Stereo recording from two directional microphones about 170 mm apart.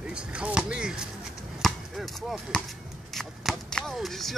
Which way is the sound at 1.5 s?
Centre (ahead or behind).